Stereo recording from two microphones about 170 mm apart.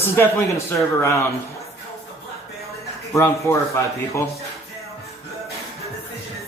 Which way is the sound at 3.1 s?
15° left (ahead or behind).